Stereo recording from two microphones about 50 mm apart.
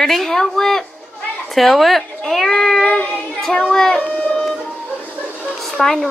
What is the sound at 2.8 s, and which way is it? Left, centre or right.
Child singing, left.